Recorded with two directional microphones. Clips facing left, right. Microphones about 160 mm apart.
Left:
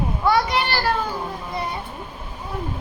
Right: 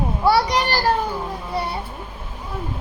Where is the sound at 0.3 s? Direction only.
35° right (ahead or behind).